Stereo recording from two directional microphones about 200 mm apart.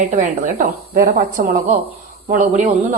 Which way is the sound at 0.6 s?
45° right (ahead or behind).